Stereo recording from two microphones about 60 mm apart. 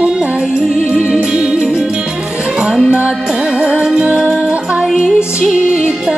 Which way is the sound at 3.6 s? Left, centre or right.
Centre.